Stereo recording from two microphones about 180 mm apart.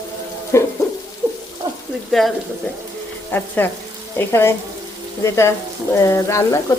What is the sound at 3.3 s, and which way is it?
Speech, 10° left (ahead or behind).